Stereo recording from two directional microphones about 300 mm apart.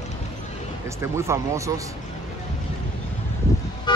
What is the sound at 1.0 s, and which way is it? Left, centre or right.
Speech, centre.